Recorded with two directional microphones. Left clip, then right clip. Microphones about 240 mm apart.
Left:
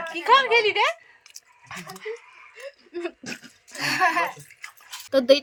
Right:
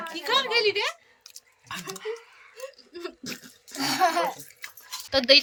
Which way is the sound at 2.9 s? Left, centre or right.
Centre.